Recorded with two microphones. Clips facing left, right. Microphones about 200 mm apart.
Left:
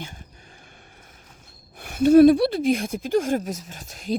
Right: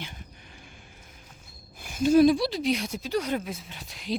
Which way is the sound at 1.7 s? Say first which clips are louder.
Left 6 dB; 65° left (ahead or behind).